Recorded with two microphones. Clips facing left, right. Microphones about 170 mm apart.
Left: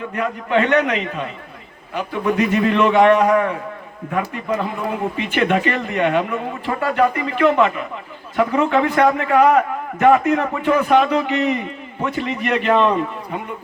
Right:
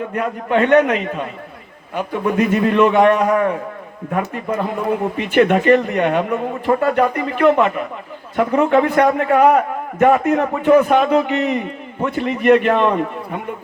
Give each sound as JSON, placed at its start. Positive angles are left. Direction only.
{"t": 0.2, "sound": "a man's voice", "side_deg": -50}